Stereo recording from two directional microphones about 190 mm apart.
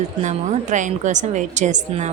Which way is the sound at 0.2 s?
40° right (ahead or behind).